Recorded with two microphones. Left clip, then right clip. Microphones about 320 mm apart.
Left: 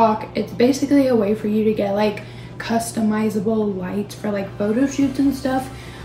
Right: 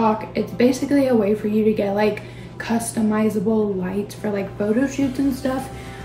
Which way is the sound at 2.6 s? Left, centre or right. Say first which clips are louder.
Left 2 dB; centre.